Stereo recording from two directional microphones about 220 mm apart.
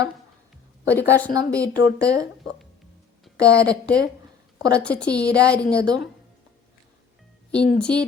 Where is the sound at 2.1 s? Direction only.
15° right (ahead or behind).